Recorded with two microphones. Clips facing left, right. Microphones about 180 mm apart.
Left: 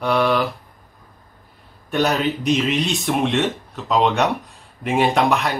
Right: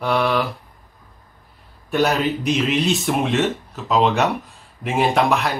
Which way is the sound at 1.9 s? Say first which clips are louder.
Right 1 dB; centre (ahead or behind).